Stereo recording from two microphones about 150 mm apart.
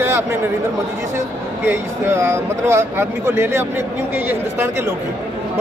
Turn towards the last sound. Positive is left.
turn(degrees=-15)  # may be behind; listen again after turning